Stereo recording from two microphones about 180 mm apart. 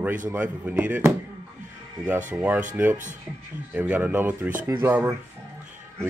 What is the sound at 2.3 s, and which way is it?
Speech, 5° right (ahead or behind).